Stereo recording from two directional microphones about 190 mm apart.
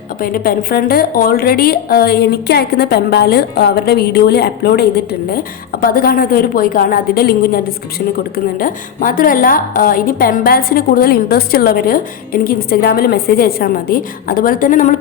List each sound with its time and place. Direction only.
0.2 s a woman's voice: 50° left (ahead or behind)